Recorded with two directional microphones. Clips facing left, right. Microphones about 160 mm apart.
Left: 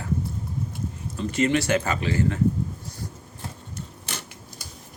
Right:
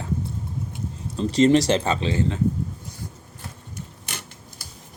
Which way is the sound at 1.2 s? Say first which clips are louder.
Right 6 dB; 35° right (ahead or behind).